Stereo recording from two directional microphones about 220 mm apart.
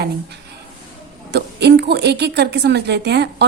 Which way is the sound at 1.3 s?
50° right (ahead or behind).